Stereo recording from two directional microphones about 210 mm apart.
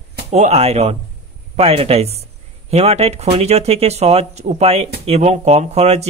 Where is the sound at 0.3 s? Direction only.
30° right (ahead or behind).